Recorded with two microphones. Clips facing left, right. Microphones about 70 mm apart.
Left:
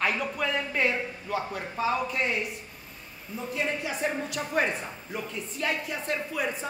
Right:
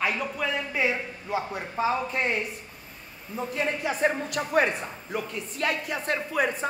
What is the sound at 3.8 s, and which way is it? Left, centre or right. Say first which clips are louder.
A woman's voice: right 4 dB; right.